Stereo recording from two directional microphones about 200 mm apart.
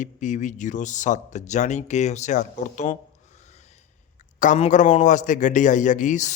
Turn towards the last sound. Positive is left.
turn(degrees=40)  # may be behind; listen again after turning